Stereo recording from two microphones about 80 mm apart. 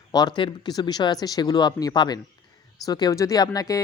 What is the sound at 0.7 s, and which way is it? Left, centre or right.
Speech, left.